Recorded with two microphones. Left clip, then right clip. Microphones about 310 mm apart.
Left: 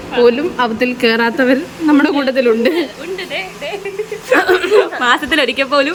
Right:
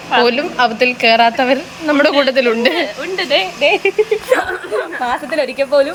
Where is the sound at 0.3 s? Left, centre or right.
Centre.